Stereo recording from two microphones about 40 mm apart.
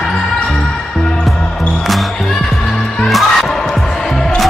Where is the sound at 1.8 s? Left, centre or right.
Centre.